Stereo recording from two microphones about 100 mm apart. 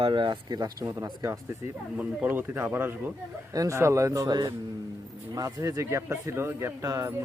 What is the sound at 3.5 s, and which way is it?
Speech, 30° right (ahead or behind).